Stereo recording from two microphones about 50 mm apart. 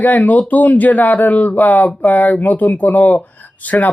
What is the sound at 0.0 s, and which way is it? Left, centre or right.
Speech, left.